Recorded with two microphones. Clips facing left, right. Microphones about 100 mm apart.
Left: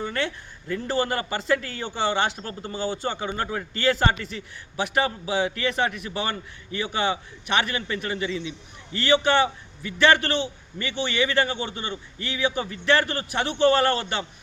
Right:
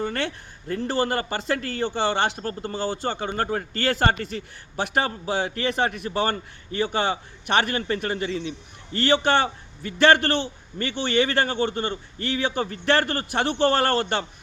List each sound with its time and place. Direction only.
0.7 s a man's voice: 35° right (ahead or behind)
2.4 s a man's voice: 45° right (ahead or behind)